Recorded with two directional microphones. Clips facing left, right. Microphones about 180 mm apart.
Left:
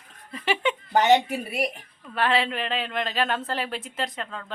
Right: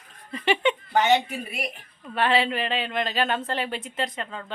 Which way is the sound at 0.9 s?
40° left (ahead or behind).